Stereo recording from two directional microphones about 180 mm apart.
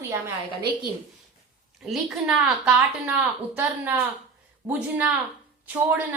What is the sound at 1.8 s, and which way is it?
A woman's voice, centre (ahead or behind).